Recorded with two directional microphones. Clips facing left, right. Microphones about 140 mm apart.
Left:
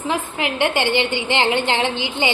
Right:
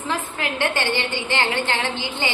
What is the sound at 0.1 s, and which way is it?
A woman's voice, 15° left (ahead or behind).